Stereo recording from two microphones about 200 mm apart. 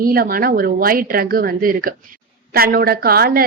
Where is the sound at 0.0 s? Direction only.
45° right (ahead or behind).